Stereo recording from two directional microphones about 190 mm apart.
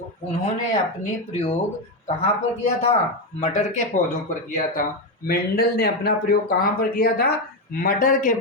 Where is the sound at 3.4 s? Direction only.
40° left (ahead or behind).